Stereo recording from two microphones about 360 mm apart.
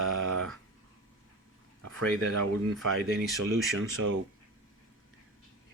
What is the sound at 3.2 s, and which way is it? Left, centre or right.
Speech, centre.